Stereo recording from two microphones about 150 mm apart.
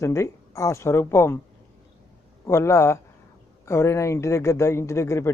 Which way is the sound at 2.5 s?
20° left (ahead or behind).